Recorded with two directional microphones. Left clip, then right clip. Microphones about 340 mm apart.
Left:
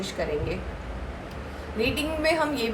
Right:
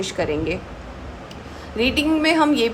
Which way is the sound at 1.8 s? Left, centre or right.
Right.